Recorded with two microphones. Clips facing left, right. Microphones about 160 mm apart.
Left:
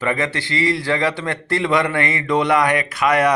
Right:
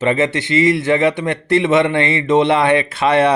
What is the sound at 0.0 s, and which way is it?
Speech, 25° right (ahead or behind).